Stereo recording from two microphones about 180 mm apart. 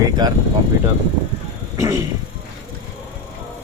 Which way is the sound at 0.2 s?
25° right (ahead or behind).